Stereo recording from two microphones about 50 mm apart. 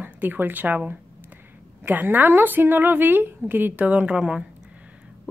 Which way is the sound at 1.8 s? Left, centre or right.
Right.